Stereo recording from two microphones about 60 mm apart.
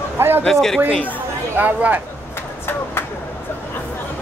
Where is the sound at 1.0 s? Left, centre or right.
Right.